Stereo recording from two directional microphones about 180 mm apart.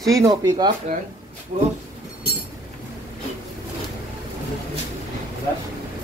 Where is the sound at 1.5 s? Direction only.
40° right (ahead or behind).